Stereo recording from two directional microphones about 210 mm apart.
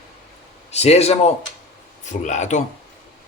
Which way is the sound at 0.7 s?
30° left (ahead or behind).